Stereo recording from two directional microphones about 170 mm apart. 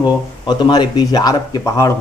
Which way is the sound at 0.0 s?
25° left (ahead or behind).